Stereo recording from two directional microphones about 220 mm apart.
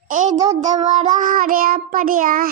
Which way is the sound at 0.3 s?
15° right (ahead or behind).